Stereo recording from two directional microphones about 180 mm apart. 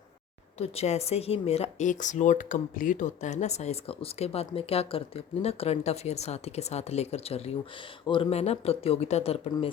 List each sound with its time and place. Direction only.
0.6 s speech: 35° left (ahead or behind)